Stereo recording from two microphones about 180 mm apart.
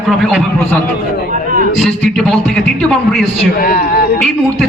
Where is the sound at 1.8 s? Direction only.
Centre (ahead or behind).